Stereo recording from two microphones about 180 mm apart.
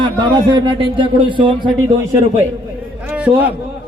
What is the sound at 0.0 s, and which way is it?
Speech, 25° right (ahead or behind).